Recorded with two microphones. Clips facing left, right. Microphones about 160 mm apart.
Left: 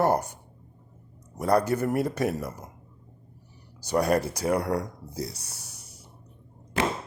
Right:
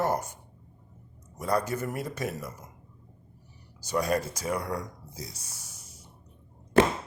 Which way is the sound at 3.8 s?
65° left (ahead or behind).